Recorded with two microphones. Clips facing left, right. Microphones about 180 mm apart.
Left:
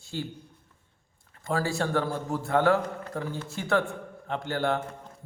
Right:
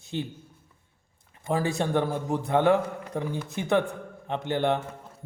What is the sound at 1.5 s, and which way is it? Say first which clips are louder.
Speech: right 2 dB; 20° right (ahead or behind).